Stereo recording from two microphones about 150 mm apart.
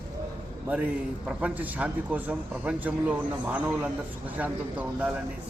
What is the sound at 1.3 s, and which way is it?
A man's voice, 10° right (ahead or behind).